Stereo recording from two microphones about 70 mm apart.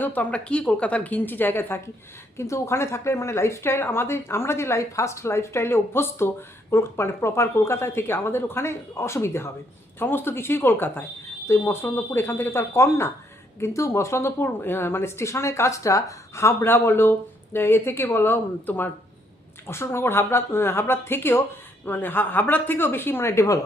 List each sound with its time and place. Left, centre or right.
0.0 s speech: left
2.4 s a woman's voice: left